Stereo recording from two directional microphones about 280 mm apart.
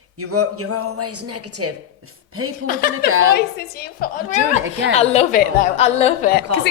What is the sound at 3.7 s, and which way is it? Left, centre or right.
Speech, left.